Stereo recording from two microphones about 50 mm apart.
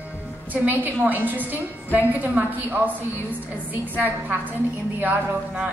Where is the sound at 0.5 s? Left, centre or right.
Right.